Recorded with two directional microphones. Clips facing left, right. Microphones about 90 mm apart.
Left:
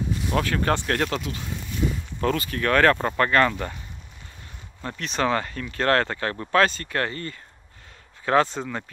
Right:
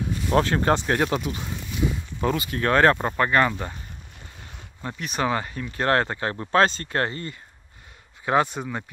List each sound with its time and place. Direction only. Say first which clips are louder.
0.3 s speech: right 4 dB; 30° right (ahead or behind)
2.5 s speech: right 1 dB; 25° right (ahead or behind)
4.8 s speech: left 1 dB; 10° right (ahead or behind)